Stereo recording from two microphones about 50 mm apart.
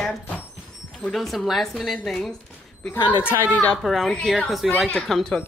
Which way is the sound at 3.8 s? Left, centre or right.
Centre.